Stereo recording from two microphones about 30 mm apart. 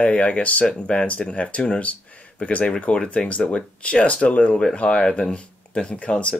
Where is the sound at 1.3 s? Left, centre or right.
Left.